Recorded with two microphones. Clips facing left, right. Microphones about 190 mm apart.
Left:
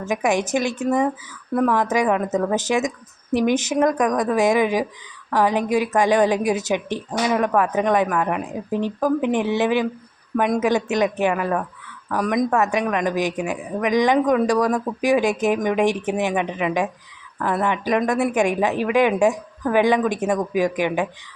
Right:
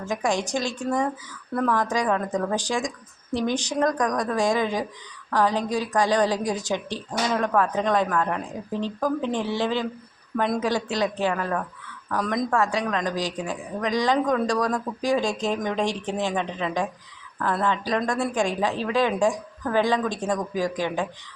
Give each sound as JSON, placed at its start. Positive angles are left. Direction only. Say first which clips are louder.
{"t": 0.0, "sound": "a woman's voice", "louder": "left 4 dB", "side_deg": 20}
{"t": 13.3, "sound": "a woman's voice", "louder": "left 5 dB", "side_deg": 10}
{"t": 13.9, "sound": "a woman's voice", "louder": "left 5 dB", "side_deg": 20}